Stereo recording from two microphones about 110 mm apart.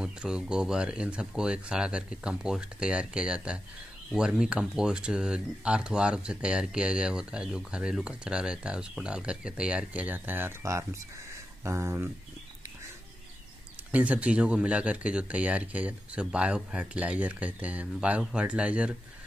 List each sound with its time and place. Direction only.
0.0 s speech: 5° right (ahead or behind); by 12.1 s 25° right (ahead or behind)
13.9 s speech: 10° right (ahead or behind)